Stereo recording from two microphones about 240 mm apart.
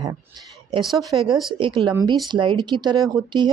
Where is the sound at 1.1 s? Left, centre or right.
Centre.